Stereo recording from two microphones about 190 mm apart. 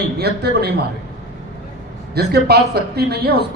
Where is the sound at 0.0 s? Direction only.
60° right (ahead or behind).